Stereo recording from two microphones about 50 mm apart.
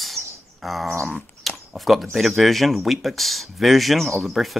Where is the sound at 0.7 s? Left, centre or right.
Centre.